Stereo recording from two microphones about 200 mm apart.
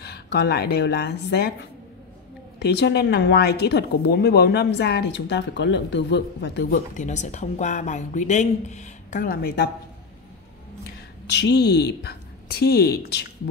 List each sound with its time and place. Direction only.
0.0 s speech: 55° left (ahead or behind)
6.9 s speech: 35° left (ahead or behind)
11.2 s speech: 60° left (ahead or behind)